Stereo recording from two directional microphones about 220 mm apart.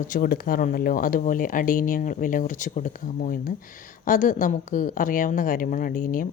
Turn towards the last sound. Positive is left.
turn(degrees=35)  # may be behind; listen again after turning